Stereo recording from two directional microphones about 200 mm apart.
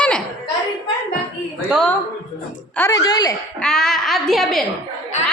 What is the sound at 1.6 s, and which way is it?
Speech, centre (ahead or behind).